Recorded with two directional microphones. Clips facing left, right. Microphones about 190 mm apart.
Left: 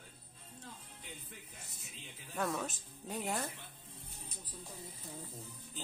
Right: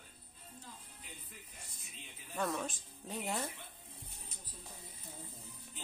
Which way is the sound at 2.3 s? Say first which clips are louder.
Even; centre (ahead or behind).